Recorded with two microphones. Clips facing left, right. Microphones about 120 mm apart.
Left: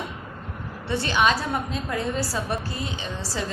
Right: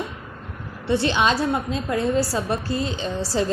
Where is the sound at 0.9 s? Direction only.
25° right (ahead or behind).